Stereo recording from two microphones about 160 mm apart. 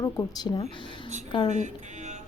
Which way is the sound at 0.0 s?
20° left (ahead or behind).